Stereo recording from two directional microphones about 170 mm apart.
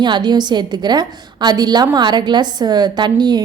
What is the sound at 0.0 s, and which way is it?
A woman's voice, 25° right (ahead or behind).